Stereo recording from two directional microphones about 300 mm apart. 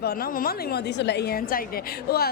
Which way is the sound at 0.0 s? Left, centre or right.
Left.